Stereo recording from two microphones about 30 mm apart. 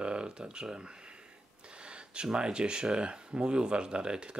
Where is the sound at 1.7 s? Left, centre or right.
Right.